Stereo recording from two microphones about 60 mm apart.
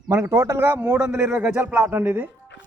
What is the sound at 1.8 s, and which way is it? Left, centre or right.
Speech, right.